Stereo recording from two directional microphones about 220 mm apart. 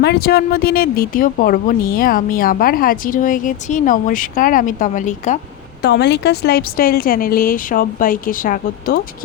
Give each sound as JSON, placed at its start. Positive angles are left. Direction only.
{"t": 0.0, "sound": "speech", "side_deg": 45}
{"t": 5.8, "sound": "speech", "side_deg": 50}